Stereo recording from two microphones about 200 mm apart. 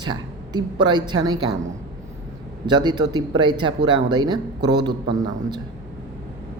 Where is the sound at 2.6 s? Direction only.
20° right (ahead or behind).